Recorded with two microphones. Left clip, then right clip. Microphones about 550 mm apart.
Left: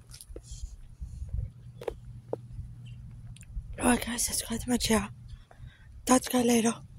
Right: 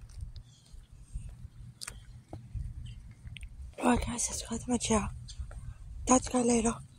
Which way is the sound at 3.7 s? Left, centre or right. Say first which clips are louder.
Left 2 dB; left.